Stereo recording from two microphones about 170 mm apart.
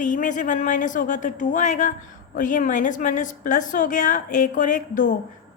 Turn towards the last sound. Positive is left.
turn(degrees=50)  # may be behind; listen again after turning